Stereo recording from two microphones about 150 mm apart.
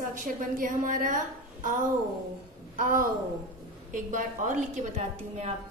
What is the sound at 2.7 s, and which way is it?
A woman's voice, 65° right (ahead or behind).